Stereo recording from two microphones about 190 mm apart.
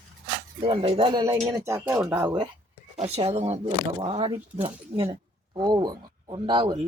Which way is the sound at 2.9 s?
35° right (ahead or behind).